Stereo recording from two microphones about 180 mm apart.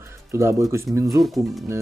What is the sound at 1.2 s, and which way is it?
Speech, centre (ahead or behind).